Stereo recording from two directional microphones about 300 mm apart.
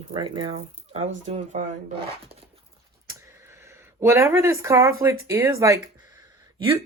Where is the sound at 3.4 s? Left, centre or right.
Centre.